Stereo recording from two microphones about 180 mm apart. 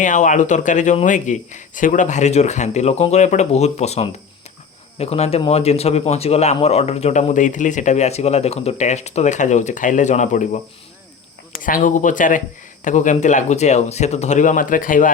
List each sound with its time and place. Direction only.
0.0 s speech: 45° left (ahead or behind)
11.6 s speech: 50° left (ahead or behind)